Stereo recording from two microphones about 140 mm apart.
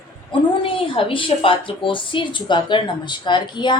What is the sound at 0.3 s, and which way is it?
A woman's voice, 40° left (ahead or behind).